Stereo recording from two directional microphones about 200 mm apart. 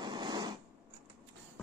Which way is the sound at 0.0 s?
20° right (ahead or behind).